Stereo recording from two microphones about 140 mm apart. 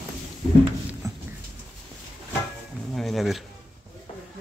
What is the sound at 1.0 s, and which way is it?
Dog, 25° right (ahead or behind).